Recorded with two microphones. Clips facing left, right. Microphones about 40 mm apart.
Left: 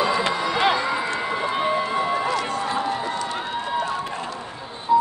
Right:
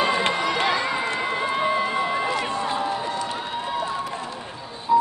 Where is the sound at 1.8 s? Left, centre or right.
Centre.